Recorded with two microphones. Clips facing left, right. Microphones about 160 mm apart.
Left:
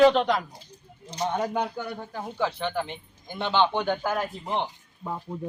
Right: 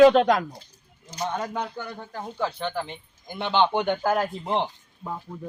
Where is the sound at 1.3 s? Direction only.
15° left (ahead or behind).